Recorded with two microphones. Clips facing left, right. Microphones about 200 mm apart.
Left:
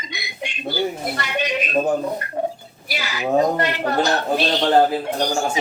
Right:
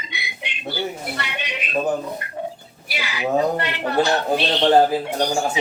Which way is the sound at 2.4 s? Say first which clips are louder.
Left 6 dB; 45° left (ahead or behind).